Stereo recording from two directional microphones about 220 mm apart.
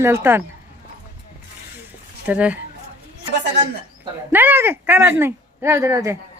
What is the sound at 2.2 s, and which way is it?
Speech, 5° right (ahead or behind).